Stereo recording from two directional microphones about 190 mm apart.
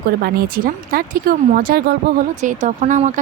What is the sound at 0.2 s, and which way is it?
Speech, 50° right (ahead or behind).